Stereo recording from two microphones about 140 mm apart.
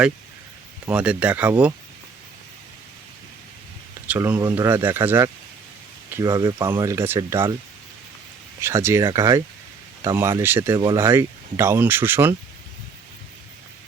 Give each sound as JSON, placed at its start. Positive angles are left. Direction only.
{"t": 0.9, "sound": "speech", "side_deg": -10}
{"t": 4.0, "sound": "speech", "side_deg": -10}
{"t": 8.6, "sound": "speech", "side_deg": -20}